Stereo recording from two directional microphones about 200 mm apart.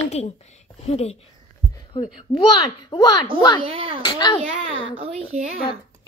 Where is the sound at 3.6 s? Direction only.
30° right (ahead or behind).